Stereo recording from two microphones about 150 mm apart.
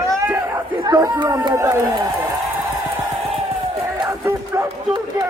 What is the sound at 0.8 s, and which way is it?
Speech, 30° right (ahead or behind).